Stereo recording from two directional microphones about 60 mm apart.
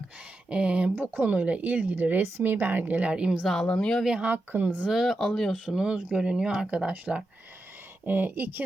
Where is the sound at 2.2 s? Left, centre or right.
Right; by 3.5 s centre.